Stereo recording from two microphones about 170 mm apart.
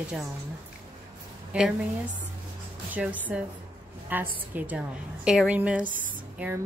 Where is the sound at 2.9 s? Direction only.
10° right (ahead or behind).